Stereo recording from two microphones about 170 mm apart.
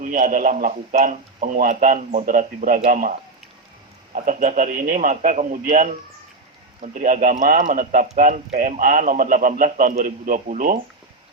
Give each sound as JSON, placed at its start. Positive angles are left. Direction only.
{"t": 0.0, "sound": "speech", "side_deg": -55}